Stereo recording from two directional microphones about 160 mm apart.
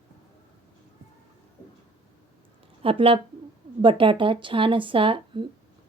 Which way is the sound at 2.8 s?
35° right (ahead or behind).